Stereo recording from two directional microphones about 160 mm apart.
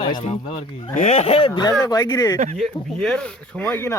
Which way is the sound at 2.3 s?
50° right (ahead or behind).